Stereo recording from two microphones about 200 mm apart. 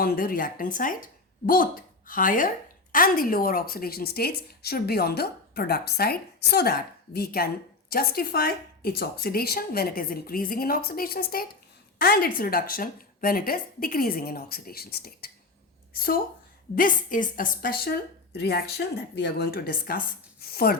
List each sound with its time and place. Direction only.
0.0 s a woman's voice: 45° left (ahead or behind)
16.7 s a woman's voice: 40° left (ahead or behind)